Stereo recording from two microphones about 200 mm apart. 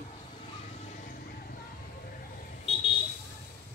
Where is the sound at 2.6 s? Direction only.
30° left (ahead or behind).